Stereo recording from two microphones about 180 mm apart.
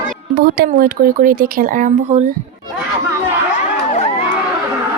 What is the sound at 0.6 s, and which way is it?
Speech, 50° right (ahead or behind).